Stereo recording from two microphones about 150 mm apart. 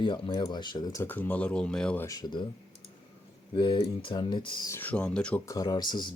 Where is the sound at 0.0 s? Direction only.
30° left (ahead or behind).